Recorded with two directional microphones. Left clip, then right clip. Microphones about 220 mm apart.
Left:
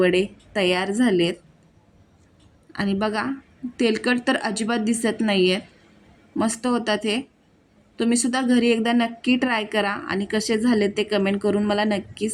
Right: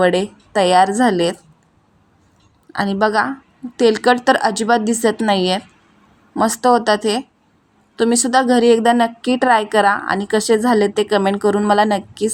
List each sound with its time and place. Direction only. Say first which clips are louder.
0.0 s a woman's voice: right 4 dB; 15° right (ahead or behind)
2.7 s a woman's voice: right 9 dB; 15° right (ahead or behind)